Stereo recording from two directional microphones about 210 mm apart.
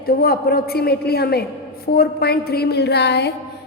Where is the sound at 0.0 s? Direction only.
45° left (ahead or behind).